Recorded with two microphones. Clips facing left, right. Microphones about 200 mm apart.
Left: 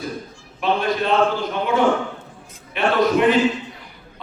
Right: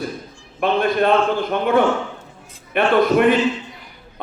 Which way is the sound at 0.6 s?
55° right (ahead or behind).